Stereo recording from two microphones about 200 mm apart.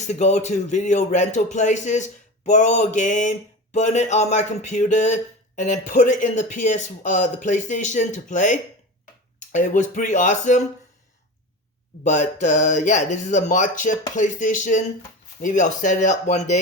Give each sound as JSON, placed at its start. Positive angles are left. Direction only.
{"t": 0.1, "sound": "speech", "side_deg": 35}
{"t": 12.0, "sound": "speech", "side_deg": 40}